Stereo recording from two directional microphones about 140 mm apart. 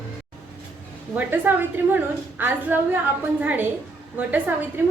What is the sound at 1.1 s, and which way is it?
A woman's voice, 15° right (ahead or behind).